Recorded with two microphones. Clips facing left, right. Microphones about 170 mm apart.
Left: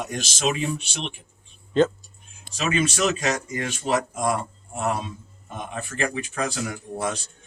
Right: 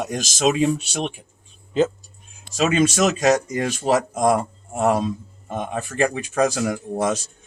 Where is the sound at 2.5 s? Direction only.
40° right (ahead or behind).